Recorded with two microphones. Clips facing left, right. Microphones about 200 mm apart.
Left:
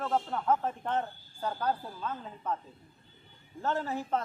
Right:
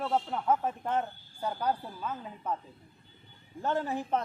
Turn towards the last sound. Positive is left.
turn(degrees=-15)  # may be behind; listen again after turning